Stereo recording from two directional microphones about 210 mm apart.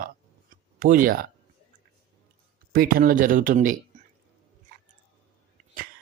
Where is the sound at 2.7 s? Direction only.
45° right (ahead or behind).